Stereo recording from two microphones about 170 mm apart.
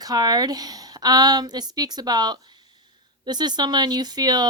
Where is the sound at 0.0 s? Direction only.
25° right (ahead or behind).